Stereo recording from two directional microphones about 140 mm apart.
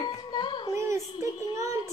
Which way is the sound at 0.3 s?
30° left (ahead or behind).